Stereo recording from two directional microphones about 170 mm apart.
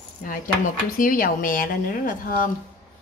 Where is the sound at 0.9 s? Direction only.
55° left (ahead or behind).